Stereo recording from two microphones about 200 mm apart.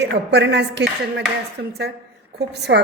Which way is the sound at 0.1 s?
60° right (ahead or behind).